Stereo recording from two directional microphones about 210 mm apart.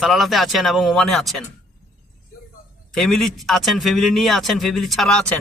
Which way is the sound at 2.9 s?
Centre (ahead or behind).